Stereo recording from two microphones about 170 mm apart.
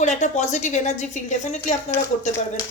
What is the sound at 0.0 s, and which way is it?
A woman's voice, 45° left (ahead or behind).